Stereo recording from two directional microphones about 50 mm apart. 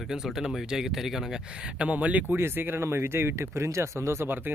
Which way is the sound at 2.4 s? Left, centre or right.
Right.